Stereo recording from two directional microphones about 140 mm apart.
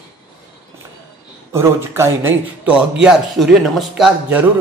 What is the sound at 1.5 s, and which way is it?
A man's voice, 20° right (ahead or behind).